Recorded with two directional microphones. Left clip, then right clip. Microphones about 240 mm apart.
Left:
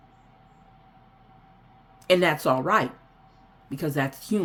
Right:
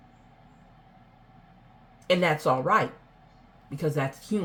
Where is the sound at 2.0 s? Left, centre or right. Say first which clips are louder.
Left 2 dB; left.